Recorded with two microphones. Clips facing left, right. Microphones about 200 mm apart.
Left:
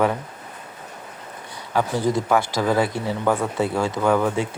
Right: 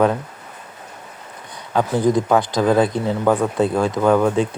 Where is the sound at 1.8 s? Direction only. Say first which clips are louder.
Right 4 dB; 15° right (ahead or behind).